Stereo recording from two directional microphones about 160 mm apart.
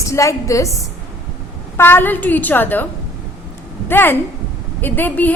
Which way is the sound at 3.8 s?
10° left (ahead or behind).